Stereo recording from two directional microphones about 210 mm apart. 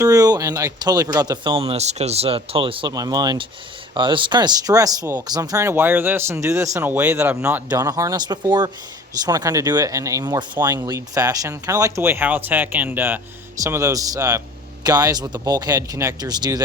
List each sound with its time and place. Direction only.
0.0 s speech: 15° right (ahead or behind)